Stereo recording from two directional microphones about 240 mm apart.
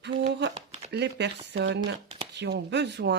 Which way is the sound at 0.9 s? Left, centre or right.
Right.